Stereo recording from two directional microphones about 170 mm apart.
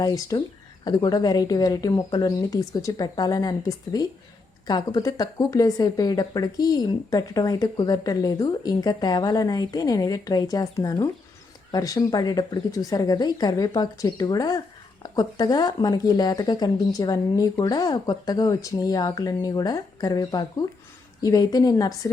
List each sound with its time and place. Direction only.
0.0 s speech: 20° left (ahead or behind)